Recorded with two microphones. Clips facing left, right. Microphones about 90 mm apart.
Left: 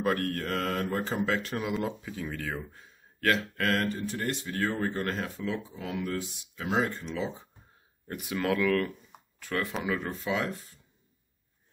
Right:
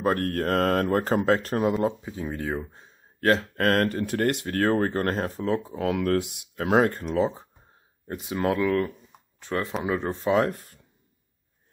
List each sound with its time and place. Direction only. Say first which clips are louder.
0.0 s speech: right 4 dB; 40° right (ahead or behind)
1.9 s speech: right 5 dB; 25° right (ahead or behind); by 5.8 s 40° right (ahead or behind)
5.8 s speech: right 9 dB; 70° right (ahead or behind)
6.5 s speech: right 8 dB; 50° right (ahead or behind)
8.1 s speech: right 4 dB; 25° right (ahead or behind); by 10.8 s 50° right (ahead or behind)